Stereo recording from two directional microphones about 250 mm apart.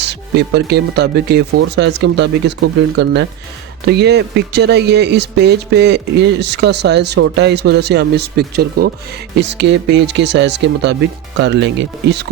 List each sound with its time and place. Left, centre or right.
0.0 s speech: right